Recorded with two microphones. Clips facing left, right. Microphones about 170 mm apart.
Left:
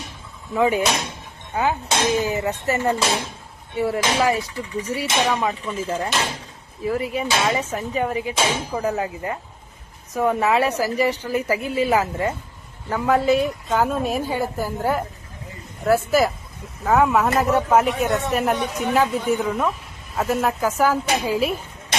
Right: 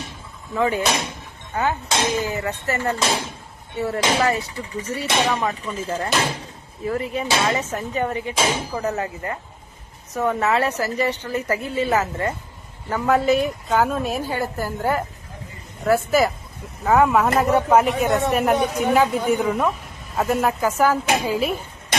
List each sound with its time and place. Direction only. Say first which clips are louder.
0.5 s a woman's voice: left 2 dB; 15° left (ahead or behind)
6.8 s a woman's voice: left 1 dB; 5° left (ahead or behind)